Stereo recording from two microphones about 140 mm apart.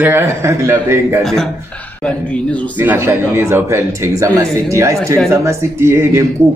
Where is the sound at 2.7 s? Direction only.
15° right (ahead or behind).